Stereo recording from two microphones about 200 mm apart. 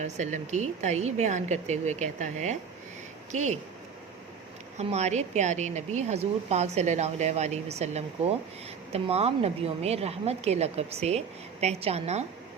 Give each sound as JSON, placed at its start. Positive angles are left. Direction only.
{"t": 0.0, "sound": "a woman's voice", "side_deg": -35}
{"t": 4.8, "sound": "a woman's voice", "side_deg": -35}